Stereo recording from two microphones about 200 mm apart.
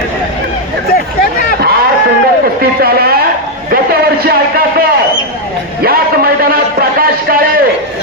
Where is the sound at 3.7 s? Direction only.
50° right (ahead or behind).